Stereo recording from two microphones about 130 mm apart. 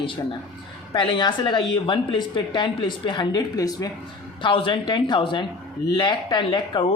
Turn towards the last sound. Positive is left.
turn(degrees=35)  # may be behind; listen again after turning